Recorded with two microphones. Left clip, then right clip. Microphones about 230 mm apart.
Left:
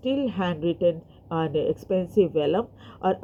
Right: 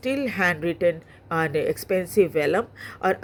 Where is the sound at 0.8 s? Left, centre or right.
Right.